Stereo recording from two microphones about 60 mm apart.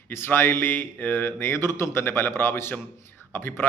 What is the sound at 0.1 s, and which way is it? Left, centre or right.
A man's voice, left.